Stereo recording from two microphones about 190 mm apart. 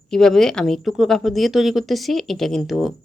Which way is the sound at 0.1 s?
Centre (ahead or behind).